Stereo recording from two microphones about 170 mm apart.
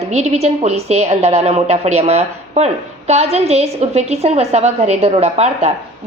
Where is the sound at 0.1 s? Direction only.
40° right (ahead or behind).